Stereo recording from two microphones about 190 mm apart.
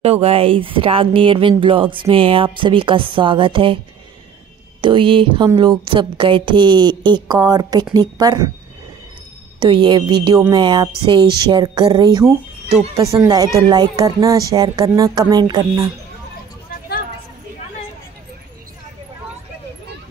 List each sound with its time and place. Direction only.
0.0 s speech: 30° right (ahead or behind)
4.8 s speech: 25° right (ahead or behind)
9.6 s speech: 25° right (ahead or behind)